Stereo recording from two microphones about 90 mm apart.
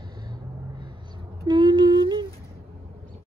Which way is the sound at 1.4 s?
60° right (ahead or behind).